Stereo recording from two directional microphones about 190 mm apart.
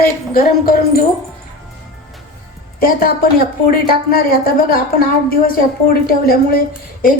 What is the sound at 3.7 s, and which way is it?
A woman's voice, 50° left (ahead or behind).